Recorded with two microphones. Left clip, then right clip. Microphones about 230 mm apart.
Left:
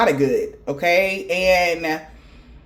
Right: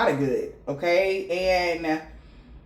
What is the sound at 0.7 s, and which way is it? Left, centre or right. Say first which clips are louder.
Speech: left 4 dB; left.